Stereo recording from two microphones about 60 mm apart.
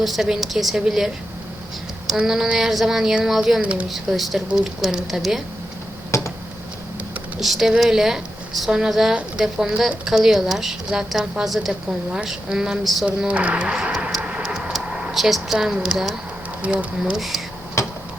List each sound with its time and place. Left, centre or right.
0.0 s speech: centre
2.2 s speech: centre
3.6 s speech: right
3.8 s speech: centre
6.1 s a sound: left
7.3 s speech: centre
13.2 s speech: right
14.2 s tick-tock: right
14.7 s a sound: centre
15.1 s speech: centre
17.8 s a sound: left